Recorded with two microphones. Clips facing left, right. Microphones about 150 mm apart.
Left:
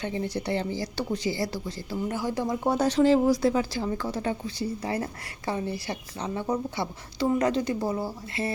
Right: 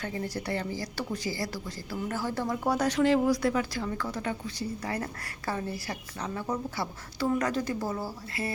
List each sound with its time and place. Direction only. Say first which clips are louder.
0.0 s a woman's voice: left 4 dB; 25° left (ahead or behind)